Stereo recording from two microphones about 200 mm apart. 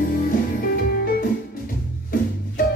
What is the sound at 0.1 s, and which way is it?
Music, 45° left (ahead or behind).